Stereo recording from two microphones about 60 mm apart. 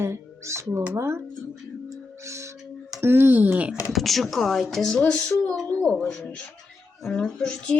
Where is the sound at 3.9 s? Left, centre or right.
Centre.